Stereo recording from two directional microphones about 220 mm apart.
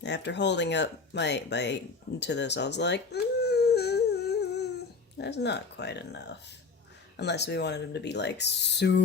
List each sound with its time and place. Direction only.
0.0 s speech: 50° left (ahead or behind)